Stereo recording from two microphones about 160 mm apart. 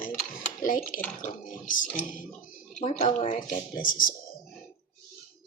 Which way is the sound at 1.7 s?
55° left (ahead or behind).